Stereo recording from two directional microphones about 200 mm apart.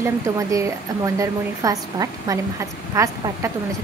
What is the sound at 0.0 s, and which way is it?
Speech, 15° right (ahead or behind).